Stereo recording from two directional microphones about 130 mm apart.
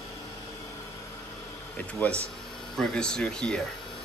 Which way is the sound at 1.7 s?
10° left (ahead or behind).